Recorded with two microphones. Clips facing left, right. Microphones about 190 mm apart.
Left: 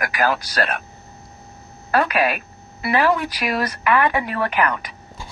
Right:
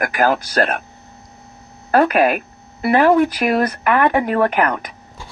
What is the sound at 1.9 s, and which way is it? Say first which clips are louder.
Speech: right 5 dB; 50° right (ahead or behind).